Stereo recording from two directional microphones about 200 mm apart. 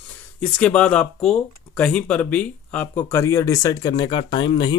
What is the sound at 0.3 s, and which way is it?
Speech, 5° left (ahead or behind).